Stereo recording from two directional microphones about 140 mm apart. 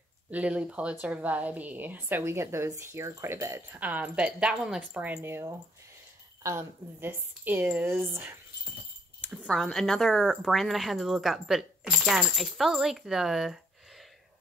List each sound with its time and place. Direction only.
0.3 s a woman's voice: 10° right (ahead or behind)
9.2 s a sound: 10° right (ahead or behind)
9.5 s speech: 5° left (ahead or behind)